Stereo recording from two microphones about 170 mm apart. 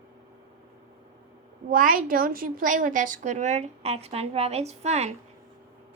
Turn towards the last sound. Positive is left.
turn(degrees=-40)  # may be behind; listen again after turning